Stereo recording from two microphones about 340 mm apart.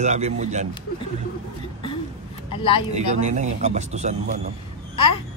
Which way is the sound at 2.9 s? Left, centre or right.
Centre.